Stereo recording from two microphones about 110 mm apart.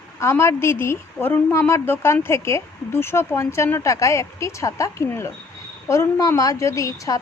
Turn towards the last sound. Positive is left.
turn(degrees=30)  # may be behind; listen again after turning